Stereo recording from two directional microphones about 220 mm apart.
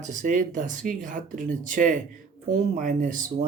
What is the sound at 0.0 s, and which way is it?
Speech, 35° right (ahead or behind).